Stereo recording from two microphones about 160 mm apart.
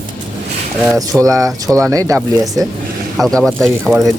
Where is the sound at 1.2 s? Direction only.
20° right (ahead or behind).